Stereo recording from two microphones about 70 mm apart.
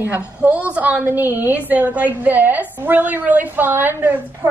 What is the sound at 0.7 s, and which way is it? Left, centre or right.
A woman's voice, centre.